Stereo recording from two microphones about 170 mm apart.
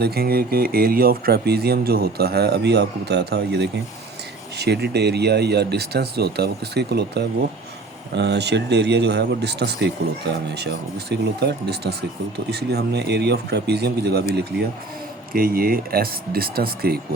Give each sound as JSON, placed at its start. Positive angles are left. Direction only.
{"t": 0.0, "sound": "speech", "side_deg": -65}
{"t": 8.1, "sound": "speech", "side_deg": -90}
{"t": 15.3, "sound": "speech", "side_deg": -60}